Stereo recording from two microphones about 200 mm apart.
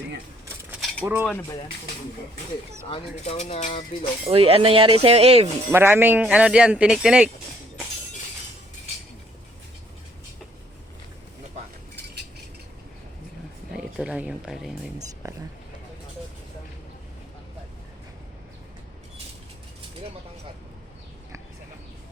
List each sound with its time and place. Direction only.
0.7 s cutlery: centre (ahead or behind)
1.2 s a sound: 10° left (ahead or behind)
3.2 s cutlery: 35° left (ahead or behind)
4.3 s speech: 30° right (ahead or behind)
5.7 s speech: 10° right (ahead or behind)
13.7 s speech: 5° right (ahead or behind)
14.9 s speech: 15° right (ahead or behind)